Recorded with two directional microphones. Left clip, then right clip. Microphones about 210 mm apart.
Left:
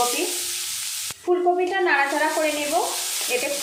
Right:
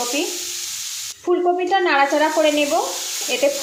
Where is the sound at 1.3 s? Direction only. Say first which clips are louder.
Right 3 dB; 35° right (ahead or behind).